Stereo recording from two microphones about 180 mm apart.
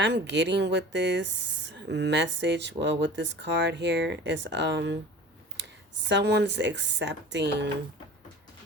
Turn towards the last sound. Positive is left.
turn(degrees=-70)  # may be behind; listen again after turning